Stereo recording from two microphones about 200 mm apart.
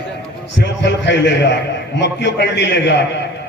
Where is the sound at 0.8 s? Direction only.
60° left (ahead or behind).